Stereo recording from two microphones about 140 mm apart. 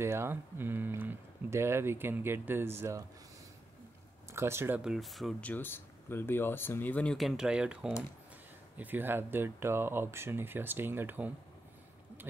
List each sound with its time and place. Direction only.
0.0 s speech: 20° right (ahead or behind)
4.3 s speech: 20° right (ahead or behind); by 5.5 s centre (ahead or behind)
5.5 s speech: 15° left (ahead or behind); by 11.3 s 15° right (ahead or behind)